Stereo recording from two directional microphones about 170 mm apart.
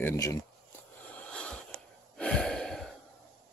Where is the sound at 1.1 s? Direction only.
5° left (ahead or behind).